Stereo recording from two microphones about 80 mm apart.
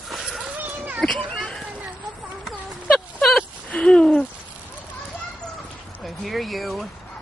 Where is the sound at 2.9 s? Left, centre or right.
Centre.